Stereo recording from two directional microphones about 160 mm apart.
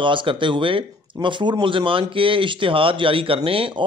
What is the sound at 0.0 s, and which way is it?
Speech, 30° right (ahead or behind).